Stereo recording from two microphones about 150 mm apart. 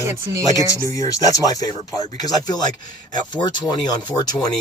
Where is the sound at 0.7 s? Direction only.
20° left (ahead or behind).